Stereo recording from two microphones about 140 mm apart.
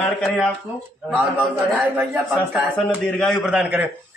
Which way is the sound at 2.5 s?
5° right (ahead or behind).